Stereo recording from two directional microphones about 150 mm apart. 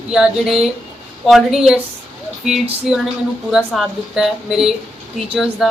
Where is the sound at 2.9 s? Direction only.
5° right (ahead or behind).